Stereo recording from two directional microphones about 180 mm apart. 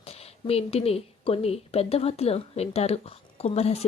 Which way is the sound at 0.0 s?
35° left (ahead or behind).